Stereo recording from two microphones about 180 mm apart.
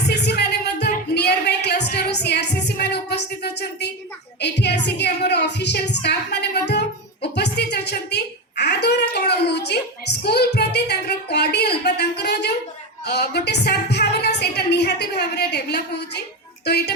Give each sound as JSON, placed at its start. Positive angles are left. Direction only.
{"t": 0.1, "sound": "music", "side_deg": 65}
{"t": 4.4, "sound": "a woman's voice", "side_deg": 70}